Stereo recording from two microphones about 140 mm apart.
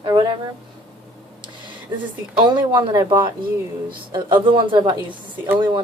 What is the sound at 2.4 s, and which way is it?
Speech, 35° right (ahead or behind).